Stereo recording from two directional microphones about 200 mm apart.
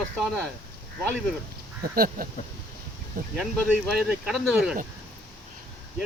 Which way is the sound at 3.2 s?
45° right (ahead or behind).